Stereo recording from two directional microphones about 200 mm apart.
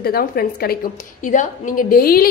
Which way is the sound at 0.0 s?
50° left (ahead or behind).